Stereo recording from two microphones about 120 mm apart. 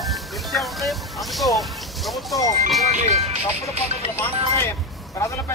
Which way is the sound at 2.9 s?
65° right (ahead or behind).